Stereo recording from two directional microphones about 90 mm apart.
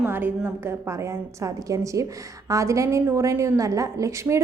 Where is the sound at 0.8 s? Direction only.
35° right (ahead or behind).